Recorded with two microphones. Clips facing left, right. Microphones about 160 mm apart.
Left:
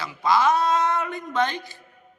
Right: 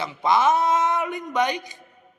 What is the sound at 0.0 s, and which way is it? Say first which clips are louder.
A man's voice: right 1 dB; 20° right (ahead or behind).